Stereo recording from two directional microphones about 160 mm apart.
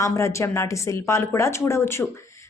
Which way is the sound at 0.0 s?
20° left (ahead or behind).